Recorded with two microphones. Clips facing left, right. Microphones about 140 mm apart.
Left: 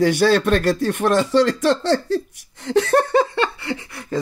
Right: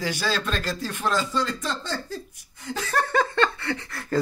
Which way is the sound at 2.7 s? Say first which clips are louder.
Left 10 dB; 60° left (ahead or behind).